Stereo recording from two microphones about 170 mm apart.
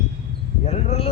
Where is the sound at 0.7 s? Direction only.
35° left (ahead or behind).